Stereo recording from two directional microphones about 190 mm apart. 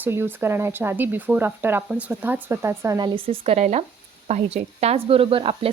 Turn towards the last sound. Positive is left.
turn(degrees=-30)  # may be behind; listen again after turning